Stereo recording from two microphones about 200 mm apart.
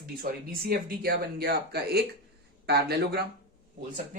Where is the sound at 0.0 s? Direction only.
50° right (ahead or behind).